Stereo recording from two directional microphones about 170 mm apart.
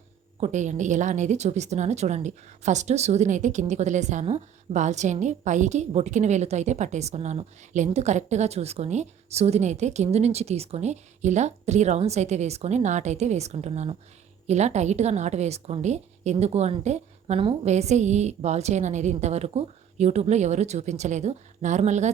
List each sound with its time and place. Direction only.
0.3 s a woman's voice: 45° right (ahead or behind)